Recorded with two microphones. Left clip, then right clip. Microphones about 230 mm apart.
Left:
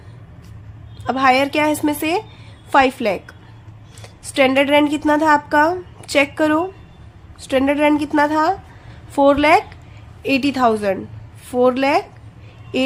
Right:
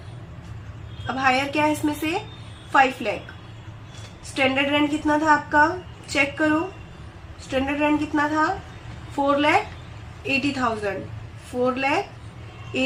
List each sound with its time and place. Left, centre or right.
1.0 s a woman's voice: left
4.4 s a woman's voice: left